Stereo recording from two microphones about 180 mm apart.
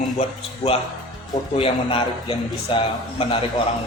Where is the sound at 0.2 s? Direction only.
35° left (ahead or behind).